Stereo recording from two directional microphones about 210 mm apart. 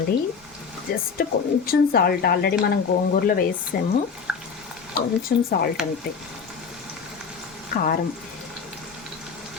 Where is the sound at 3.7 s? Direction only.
40° left (ahead or behind).